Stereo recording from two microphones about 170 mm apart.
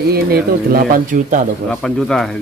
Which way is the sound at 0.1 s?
65° right (ahead or behind).